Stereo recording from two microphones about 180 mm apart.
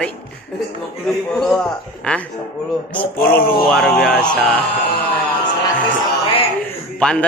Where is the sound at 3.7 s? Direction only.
Centre (ahead or behind).